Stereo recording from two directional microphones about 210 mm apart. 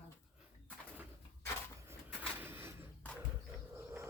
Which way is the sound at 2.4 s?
10° right (ahead or behind).